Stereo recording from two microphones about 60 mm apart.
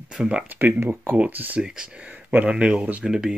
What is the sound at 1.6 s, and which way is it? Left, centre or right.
Speech, centre.